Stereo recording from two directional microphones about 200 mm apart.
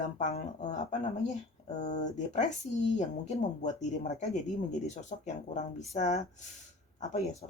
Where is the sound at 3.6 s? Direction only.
35° left (ahead or behind).